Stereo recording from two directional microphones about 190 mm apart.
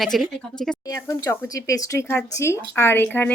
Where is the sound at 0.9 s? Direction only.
15° left (ahead or behind).